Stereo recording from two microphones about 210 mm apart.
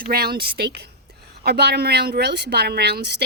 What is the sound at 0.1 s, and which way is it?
A woman's voice, 45° right (ahead or behind).